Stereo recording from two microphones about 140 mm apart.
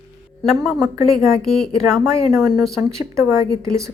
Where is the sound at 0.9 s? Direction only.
25° right (ahead or behind).